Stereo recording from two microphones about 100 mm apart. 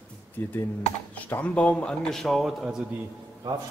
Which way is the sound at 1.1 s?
15° left (ahead or behind).